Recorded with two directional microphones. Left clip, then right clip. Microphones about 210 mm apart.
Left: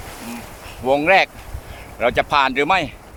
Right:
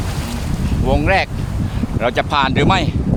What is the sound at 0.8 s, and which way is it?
Speech, 20° left (ahead or behind).